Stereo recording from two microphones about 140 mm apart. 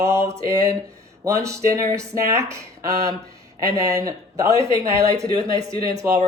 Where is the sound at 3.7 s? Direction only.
25° right (ahead or behind).